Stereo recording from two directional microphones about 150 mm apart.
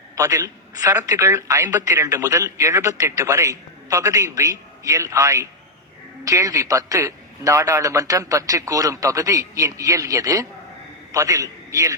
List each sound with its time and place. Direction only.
0.2 s a woman's voice: 20° right (ahead or behind)